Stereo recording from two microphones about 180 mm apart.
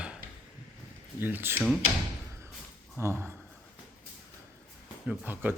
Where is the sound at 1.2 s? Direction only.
10° right (ahead or behind).